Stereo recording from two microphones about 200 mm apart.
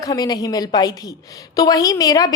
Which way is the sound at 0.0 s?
20° left (ahead or behind).